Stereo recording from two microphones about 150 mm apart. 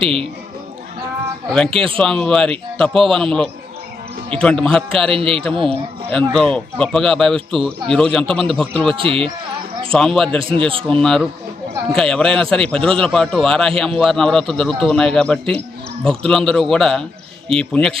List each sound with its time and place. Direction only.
0.0 s speech: 35° right (ahead or behind)
1.5 s speech: 5° left (ahead or behind)
4.4 s speech: 5° left (ahead or behind)
5.1 s speech: 40° right (ahead or behind)
5.6 s speech: 5° left (ahead or behind)
9.0 s speech: 35° right (ahead or behind)
9.9 s speech: 5° left (ahead or behind)